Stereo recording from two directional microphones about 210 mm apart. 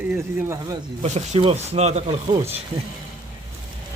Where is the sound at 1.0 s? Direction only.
35° right (ahead or behind).